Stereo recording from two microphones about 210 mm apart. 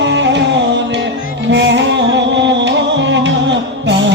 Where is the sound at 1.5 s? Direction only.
60° right (ahead or behind).